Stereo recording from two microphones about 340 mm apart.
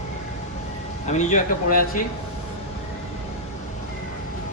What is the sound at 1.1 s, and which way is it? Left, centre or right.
Speech, left.